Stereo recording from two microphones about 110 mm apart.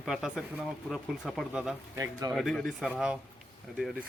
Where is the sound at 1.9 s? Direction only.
30° right (ahead or behind).